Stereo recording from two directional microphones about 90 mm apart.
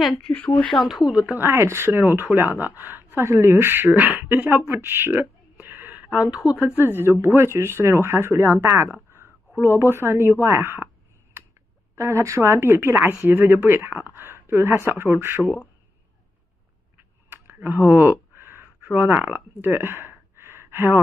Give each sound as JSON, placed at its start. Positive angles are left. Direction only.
{"t": 0.3, "sound": "speech", "side_deg": 20}
{"t": 0.7, "sound": "speech", "side_deg": 5}
{"t": 1.4, "sound": "speech", "side_deg": -30}
{"t": 6.6, "sound": "speech", "side_deg": -25}
{"t": 11.9, "sound": "speech", "side_deg": -30}
{"t": 17.3, "sound": "a sound", "side_deg": -25}
{"t": 18.9, "sound": "speech", "side_deg": -20}